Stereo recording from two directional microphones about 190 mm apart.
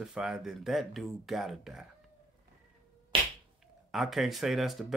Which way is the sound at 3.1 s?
25° right (ahead or behind).